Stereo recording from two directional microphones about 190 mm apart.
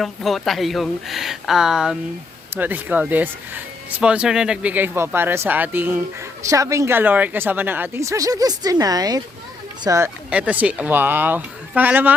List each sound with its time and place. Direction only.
0.0 s speech: centre (ahead or behind)